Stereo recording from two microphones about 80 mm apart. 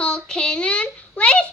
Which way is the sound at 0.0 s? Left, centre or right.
Centre.